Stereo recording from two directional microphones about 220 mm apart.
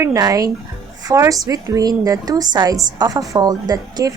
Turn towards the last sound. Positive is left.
turn(degrees=-15)  # may be behind; listen again after turning